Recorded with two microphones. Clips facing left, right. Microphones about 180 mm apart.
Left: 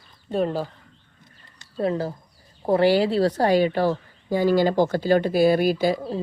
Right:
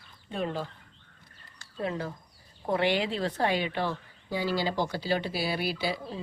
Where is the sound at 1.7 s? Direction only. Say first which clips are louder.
Left 8 dB; 35° left (ahead or behind).